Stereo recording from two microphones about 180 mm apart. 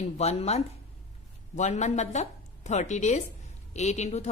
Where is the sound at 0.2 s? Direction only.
35° left (ahead or behind).